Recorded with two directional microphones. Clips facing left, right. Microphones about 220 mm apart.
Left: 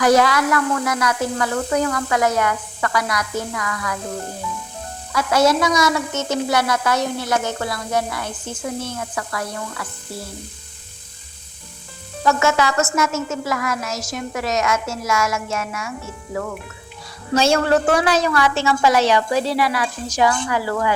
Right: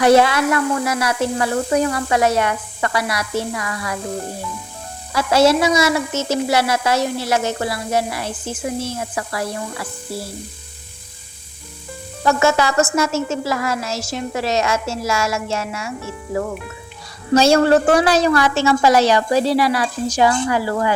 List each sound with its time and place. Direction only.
0.0 s speech: 25° right (ahead or behind)
5.1 s speech: 30° right (ahead or behind)
12.2 s speech: 35° right (ahead or behind)
17.3 s a woman's voice: 35° right (ahead or behind)